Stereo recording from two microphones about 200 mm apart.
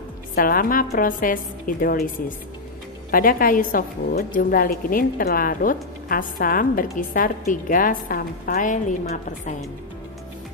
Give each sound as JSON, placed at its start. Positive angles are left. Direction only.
{"t": 0.4, "sound": "a woman's voice", "side_deg": 45}